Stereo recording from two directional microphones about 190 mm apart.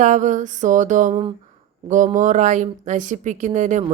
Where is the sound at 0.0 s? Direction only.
40° right (ahead or behind).